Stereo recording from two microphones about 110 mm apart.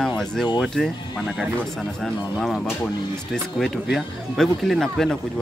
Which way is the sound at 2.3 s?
Centre (ahead or behind).